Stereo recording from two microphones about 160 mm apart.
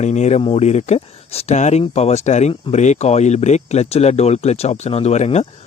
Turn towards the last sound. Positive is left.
turn(degrees=45)  # may be behind; listen again after turning